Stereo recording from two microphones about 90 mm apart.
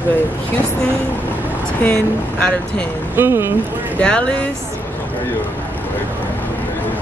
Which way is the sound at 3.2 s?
25° right (ahead or behind).